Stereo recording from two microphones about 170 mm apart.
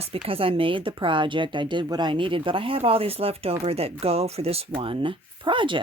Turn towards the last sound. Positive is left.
turn(degrees=-30)  # may be behind; listen again after turning